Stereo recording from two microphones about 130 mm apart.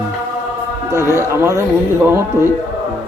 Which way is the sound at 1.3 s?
20° right (ahead or behind).